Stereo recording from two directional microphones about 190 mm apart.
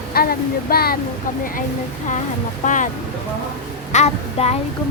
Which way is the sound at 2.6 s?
40° left (ahead or behind).